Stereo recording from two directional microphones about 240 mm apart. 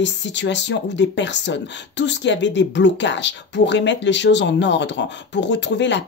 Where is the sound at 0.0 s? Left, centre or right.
Left.